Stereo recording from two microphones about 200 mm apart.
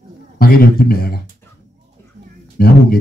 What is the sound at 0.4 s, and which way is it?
Speech, 50° left (ahead or behind).